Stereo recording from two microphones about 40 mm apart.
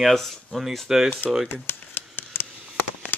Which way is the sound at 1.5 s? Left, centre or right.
Left.